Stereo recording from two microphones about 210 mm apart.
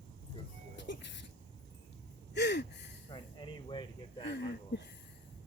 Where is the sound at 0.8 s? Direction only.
55° left (ahead or behind).